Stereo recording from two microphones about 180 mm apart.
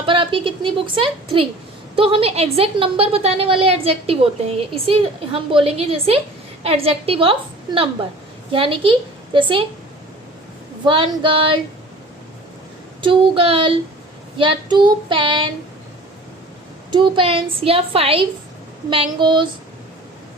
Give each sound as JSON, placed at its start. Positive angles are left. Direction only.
{"t": 0.0, "sound": "a woman's voice", "side_deg": -30}
{"t": 10.8, "sound": "child singing", "side_deg": -30}
{"t": 13.0, "sound": "child singing", "side_deg": -30}
{"t": 16.9, "sound": "a woman's voice", "side_deg": -25}
{"t": 18.9, "sound": "child singing", "side_deg": -25}